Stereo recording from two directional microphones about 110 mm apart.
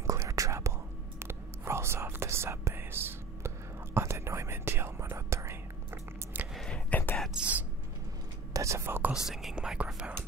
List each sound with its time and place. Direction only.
0.0 s whispering: 30° right (ahead or behind)
6.5 s whispering: 5° left (ahead or behind)
7.3 s whispering: 10° right (ahead or behind)
8.5 s whispering: 25° right (ahead or behind)
9.3 s whispering: centre (ahead or behind)